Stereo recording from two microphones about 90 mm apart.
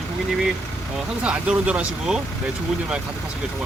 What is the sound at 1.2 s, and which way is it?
Speech, 10° right (ahead or behind).